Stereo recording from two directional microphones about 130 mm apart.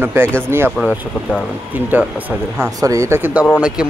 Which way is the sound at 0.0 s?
15° right (ahead or behind).